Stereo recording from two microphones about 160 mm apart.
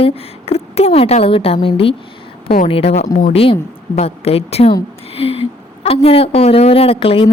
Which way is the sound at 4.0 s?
40° left (ahead or behind).